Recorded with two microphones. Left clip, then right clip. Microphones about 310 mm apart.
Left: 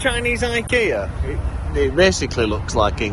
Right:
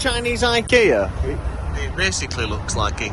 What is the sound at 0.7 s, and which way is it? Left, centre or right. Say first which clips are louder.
Speech: right 4 dB; right.